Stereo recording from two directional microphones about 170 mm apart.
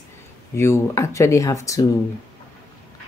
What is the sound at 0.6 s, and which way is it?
Speech, 15° left (ahead or behind).